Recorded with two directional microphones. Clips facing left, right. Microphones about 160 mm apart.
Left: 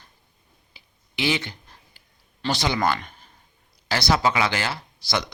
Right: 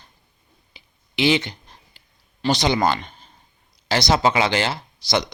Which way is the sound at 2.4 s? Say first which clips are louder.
Right 4 dB; 20° right (ahead or behind).